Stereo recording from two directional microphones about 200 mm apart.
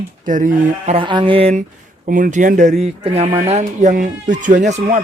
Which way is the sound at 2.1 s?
45° right (ahead or behind).